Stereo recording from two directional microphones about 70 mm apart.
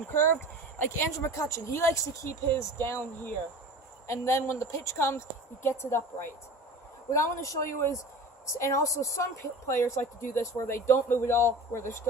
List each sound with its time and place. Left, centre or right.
0.1 s speech: left
7.1 s speech: left
9.6 s speech: left